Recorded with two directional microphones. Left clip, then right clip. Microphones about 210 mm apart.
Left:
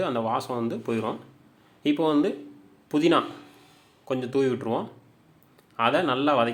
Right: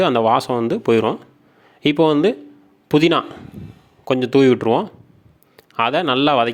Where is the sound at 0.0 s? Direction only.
40° right (ahead or behind).